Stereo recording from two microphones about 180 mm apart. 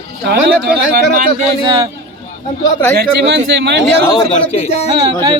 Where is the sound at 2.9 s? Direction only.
70° right (ahead or behind).